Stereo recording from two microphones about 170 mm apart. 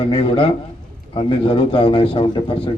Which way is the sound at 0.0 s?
30° left (ahead or behind).